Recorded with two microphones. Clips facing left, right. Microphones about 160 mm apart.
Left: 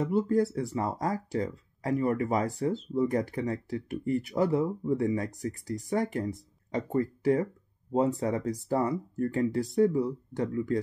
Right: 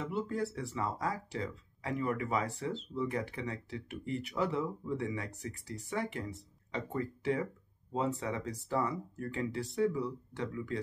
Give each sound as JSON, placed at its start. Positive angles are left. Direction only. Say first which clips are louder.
{"t": 0.0, "sound": "speech", "louder": "left 9 dB", "side_deg": 40}